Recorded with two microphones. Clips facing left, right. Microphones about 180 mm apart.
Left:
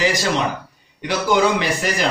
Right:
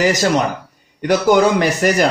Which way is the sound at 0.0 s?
45° right (ahead or behind).